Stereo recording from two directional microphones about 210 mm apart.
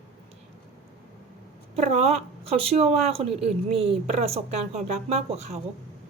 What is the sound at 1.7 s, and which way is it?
A woman's voice, 30° right (ahead or behind).